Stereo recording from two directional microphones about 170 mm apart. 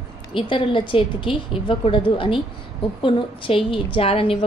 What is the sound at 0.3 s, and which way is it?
A woman's voice, 30° left (ahead or behind).